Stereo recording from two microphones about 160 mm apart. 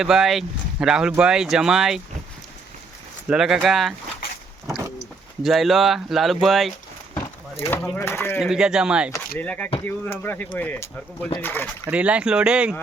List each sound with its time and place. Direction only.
0.0 s speech: centre (ahead or behind)
3.2 s speech: 5° right (ahead or behind)
5.4 s speech: centre (ahead or behind)
7.1 s a sound: 40° left (ahead or behind)
7.9 s speech: 15° left (ahead or behind)
8.4 s speech: 5° right (ahead or behind)
9.4 s speech: 10° left (ahead or behind)
11.9 s speech: 10° right (ahead or behind)